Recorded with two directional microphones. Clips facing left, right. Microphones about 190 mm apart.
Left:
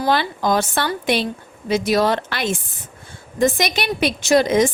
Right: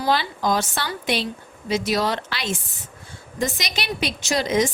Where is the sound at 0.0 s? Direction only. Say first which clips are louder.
Left 3 dB; 55° left (ahead or behind).